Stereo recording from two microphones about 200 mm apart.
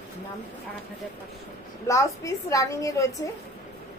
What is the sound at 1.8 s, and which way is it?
A woman's voice, 15° left (ahead or behind).